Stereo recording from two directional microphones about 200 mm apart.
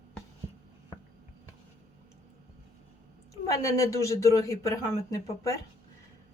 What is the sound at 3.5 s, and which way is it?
A man's voice, 15° left (ahead or behind).